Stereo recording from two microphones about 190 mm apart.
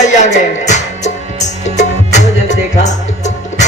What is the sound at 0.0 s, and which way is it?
Music, 40° left (ahead or behind).